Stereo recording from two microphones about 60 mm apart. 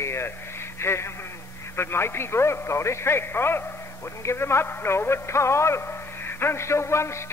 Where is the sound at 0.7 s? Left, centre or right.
Left.